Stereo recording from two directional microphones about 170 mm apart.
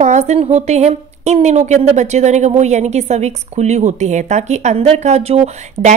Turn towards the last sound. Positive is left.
turn(degrees=-40)  # may be behind; listen again after turning